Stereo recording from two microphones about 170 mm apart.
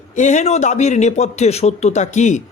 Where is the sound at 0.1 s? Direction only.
45° left (ahead or behind).